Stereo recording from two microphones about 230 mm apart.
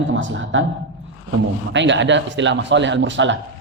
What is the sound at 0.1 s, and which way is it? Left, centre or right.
Speech, right.